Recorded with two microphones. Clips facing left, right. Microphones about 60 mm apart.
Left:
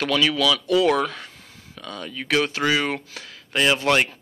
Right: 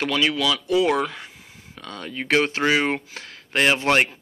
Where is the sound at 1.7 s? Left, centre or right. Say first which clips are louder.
Right 1 dB; right.